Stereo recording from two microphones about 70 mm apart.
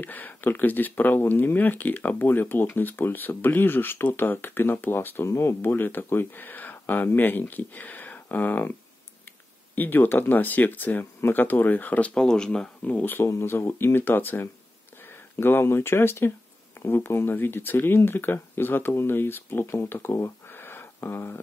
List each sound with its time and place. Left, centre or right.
0.0 s speech: left
9.8 s speech: left
12.1 s speech: centre
12.8 s speech: left